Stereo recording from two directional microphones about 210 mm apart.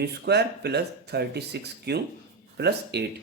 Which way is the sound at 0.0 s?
50° right (ahead or behind).